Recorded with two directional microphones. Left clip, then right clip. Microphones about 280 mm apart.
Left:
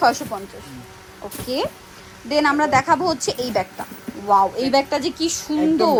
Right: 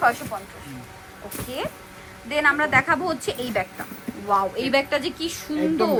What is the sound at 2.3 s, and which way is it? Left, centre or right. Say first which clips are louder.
A woman's voice: left 2 dB; centre.